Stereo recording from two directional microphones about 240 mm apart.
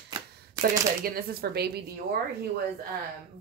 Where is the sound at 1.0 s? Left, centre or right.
Right.